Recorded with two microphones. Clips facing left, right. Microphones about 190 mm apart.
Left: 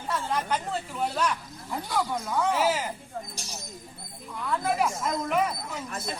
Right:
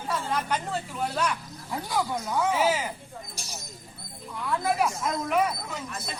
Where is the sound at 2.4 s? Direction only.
Centre (ahead or behind).